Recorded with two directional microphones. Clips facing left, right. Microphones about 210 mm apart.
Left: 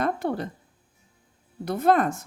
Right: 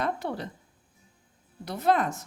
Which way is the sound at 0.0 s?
50° left (ahead or behind).